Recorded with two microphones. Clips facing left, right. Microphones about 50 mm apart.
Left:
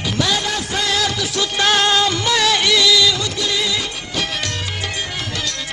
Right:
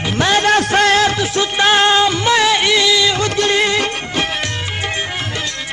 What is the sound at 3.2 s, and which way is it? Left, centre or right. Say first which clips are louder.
Music: right 6 dB; right.